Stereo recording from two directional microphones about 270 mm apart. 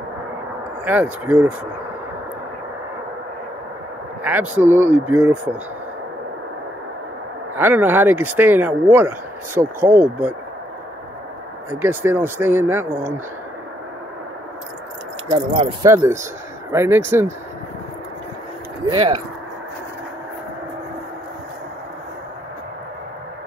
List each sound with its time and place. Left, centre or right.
0.8 s speech: centre
4.2 s speech: centre
7.5 s speech: centre
11.8 s speech: centre
15.2 s speech: centre
18.9 s speech: centre